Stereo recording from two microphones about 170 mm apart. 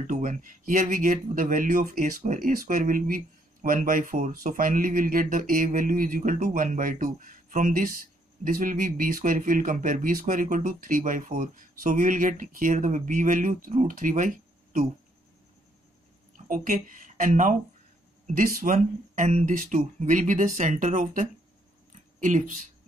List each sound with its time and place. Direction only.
0.0 s speech: 50° right (ahead or behind)
16.3 s speech: 55° right (ahead or behind)